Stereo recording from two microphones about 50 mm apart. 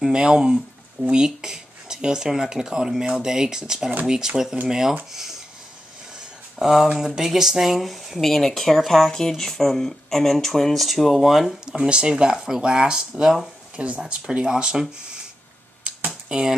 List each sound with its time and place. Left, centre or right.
0.0 s speech: centre
6.6 s speech: centre
11.7 s speech: centre
13.7 s speech: right
15.8 s computer keyboard: centre
16.3 s speech: centre